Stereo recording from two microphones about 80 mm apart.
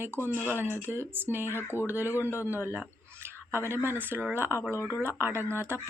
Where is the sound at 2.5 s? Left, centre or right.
Right.